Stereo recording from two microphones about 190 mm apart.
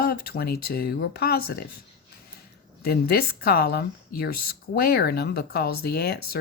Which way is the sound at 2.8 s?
55° left (ahead or behind).